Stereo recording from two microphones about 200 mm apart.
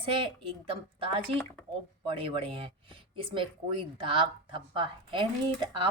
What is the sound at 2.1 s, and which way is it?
Speech, 25° right (ahead or behind).